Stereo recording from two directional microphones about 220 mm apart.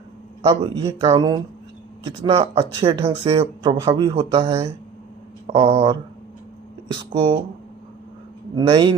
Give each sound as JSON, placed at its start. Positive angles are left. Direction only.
{"t": 0.4, "sound": "speech", "side_deg": -20}
{"t": 7.0, "sound": "speech", "side_deg": -20}
{"t": 8.5, "sound": "speech", "side_deg": -20}